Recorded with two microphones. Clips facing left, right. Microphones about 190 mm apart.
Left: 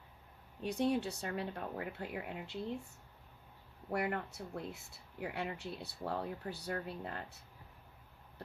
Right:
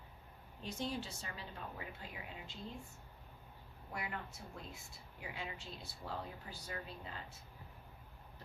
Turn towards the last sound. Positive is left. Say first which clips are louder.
# left 6 dB
turn(degrees=65)  # may be behind; listen again after turning